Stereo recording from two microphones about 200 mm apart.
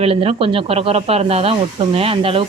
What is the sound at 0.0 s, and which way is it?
A woman's voice, 30° right (ahead or behind).